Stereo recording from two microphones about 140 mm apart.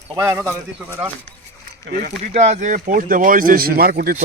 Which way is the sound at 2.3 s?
55° right (ahead or behind).